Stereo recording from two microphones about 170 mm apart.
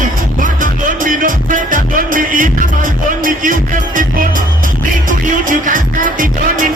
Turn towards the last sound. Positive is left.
turn(degrees=-50)  # may be behind; listen again after turning